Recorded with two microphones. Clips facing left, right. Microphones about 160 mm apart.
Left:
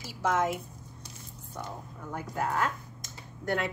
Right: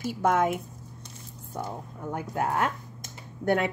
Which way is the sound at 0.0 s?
55° right (ahead or behind).